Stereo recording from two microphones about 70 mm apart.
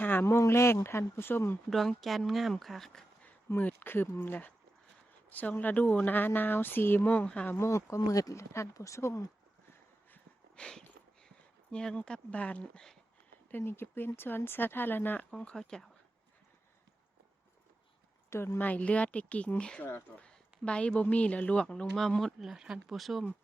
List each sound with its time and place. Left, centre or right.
0.0 s a sound: left
0.3 s speech: left
2.0 s speech: centre
3.5 s speech: left
7.6 s speech: left
10.5 s a sound: centre
11.7 s a woman's voice: centre
13.5 s speech: left
15.3 s a woman's voice: centre
18.3 s speech: left
18.6 s speech: left
19.8 s speech: left
20.1 s a woman's voice: centre